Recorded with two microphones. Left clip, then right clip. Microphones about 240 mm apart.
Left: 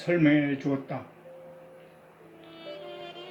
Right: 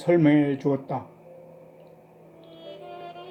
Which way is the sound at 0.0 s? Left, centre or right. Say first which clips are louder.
Right 4 dB; right.